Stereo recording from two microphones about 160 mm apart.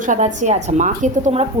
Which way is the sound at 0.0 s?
50° right (ahead or behind).